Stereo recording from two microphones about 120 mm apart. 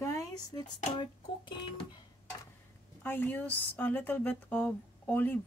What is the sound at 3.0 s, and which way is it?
Speech, 15° left (ahead or behind).